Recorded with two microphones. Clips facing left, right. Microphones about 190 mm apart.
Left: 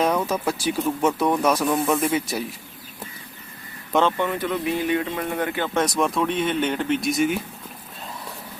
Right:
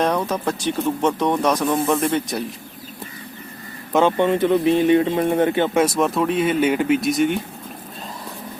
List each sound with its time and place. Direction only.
0.0 s music: 5° left (ahead or behind)
0.4 s speech: 5° left (ahead or behind)
4.2 s speech: 25° right (ahead or behind)
6.0 s speech: centre (ahead or behind)